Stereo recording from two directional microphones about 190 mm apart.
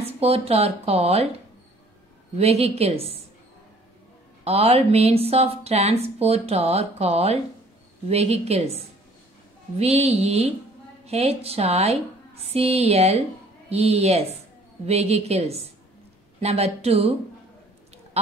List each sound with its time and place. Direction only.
0.0 s speech: 30° right (ahead or behind)
2.3 s speech: 35° right (ahead or behind)
4.5 s speech: 30° right (ahead or behind)
18.1 s duck: 35° right (ahead or behind)